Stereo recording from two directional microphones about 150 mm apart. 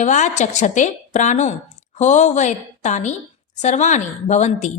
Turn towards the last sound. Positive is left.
turn(degrees=50)  # may be behind; listen again after turning